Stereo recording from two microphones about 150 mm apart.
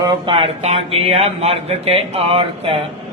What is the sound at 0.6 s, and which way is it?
Speech, 40° right (ahead or behind).